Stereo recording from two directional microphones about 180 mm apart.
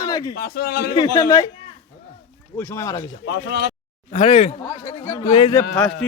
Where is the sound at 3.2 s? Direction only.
80° left.